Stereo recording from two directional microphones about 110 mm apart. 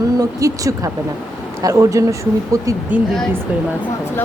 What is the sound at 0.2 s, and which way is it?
Speech, 30° right (ahead or behind).